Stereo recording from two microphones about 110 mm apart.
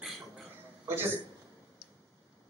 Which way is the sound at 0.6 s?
20° right (ahead or behind).